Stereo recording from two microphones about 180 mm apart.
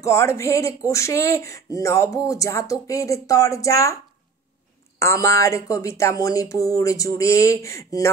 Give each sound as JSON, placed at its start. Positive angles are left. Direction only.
{"t": 0.0, "sound": "speech", "side_deg": 15}
{"t": 4.9, "sound": "speech", "side_deg": 15}